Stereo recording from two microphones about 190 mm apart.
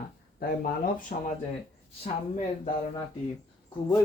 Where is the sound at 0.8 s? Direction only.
45° left (ahead or behind).